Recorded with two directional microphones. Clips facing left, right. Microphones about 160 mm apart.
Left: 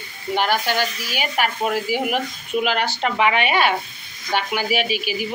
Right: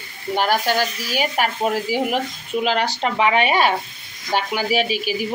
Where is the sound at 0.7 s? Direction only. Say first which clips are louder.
Right 2 dB; 40° right (ahead or behind).